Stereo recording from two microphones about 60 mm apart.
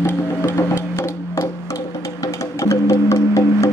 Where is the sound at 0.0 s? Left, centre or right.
Left.